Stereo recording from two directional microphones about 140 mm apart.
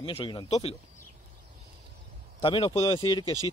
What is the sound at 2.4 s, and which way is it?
Speech, 35° left (ahead or behind).